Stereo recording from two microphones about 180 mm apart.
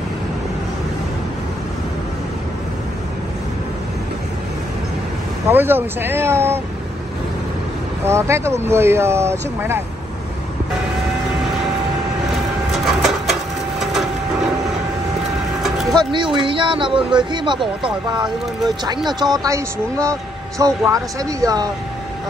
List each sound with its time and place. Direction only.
5.5 s speech: 10° right (ahead or behind)
8.0 s speech: 15° right (ahead or behind)
12.7 s a sound: centre (ahead or behind)
15.9 s speech: 25° right (ahead or behind)
19.3 s speech: 20° right (ahead or behind)